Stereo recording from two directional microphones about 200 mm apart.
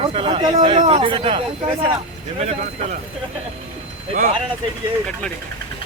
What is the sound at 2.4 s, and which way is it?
Speech, 35° right (ahead or behind).